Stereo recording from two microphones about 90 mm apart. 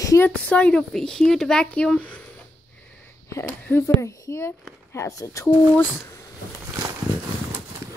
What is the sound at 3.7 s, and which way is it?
A woman's voice, 30° left (ahead or behind).